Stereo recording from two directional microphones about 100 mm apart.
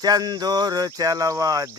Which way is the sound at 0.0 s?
40° right (ahead or behind).